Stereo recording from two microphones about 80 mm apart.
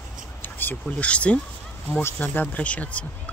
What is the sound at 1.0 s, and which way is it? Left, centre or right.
Speech, centre.